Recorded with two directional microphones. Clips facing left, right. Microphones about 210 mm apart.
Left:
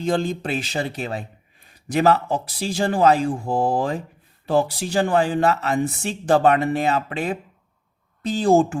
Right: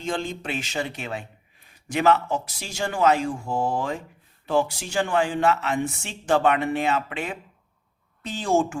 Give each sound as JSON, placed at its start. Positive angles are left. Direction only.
{"t": 0.0, "sound": "speech", "side_deg": 35}